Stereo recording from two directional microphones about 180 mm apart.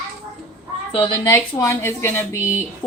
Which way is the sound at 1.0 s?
20° left (ahead or behind).